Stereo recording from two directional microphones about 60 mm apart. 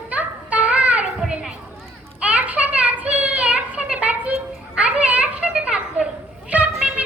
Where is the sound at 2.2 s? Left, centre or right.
Right.